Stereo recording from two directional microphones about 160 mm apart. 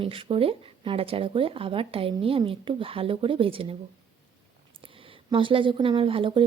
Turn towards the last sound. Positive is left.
turn(degrees=-30)  # may be behind; listen again after turning